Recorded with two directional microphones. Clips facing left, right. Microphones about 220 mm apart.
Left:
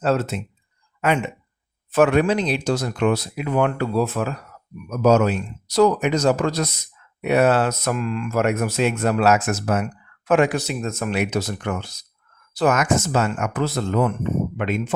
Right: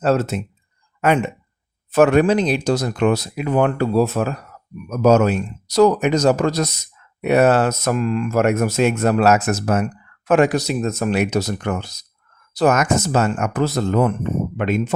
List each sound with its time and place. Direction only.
0.0 s speech: 40° right (ahead or behind)
1.9 s speech: 40° right (ahead or behind)